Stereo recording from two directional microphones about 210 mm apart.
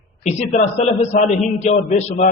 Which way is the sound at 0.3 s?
35° left (ahead or behind).